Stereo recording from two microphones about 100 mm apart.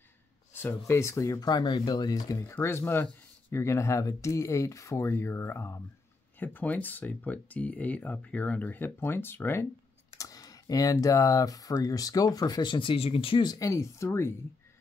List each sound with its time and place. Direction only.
0.5 s speech: 20° left (ahead or behind)
1.5 s speech: 45° left (ahead or behind)
2.4 s speech: 25° left (ahead or behind)
10.1 s speech: 35° left (ahead or behind); by 13.5 s 65° left (ahead or behind)
13.5 s speech: 30° left (ahead or behind)